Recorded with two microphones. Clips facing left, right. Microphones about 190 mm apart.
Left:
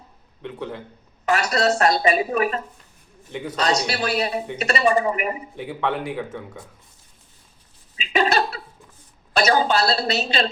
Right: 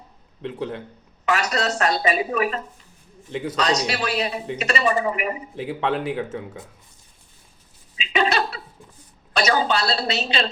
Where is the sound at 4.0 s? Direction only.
45° left (ahead or behind).